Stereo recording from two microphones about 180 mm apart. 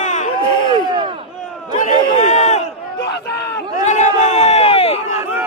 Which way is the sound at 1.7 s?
45° left (ahead or behind).